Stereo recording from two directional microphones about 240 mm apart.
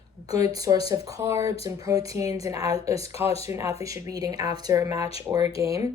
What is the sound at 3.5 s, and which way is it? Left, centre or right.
Speech, centre.